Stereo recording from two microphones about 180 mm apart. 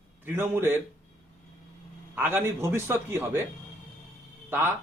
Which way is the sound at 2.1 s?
10° right (ahead or behind).